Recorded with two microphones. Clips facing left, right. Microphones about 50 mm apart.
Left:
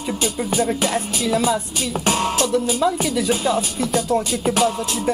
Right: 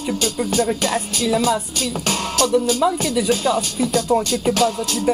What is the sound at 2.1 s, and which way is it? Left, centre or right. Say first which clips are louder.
Speech: left 1 dB; centre.